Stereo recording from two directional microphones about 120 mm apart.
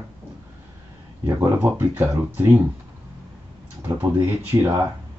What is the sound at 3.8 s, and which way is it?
Speech, 15° right (ahead or behind).